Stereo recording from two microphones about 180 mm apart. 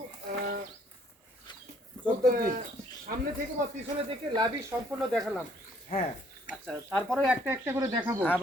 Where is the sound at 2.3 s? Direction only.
55° right (ahead or behind).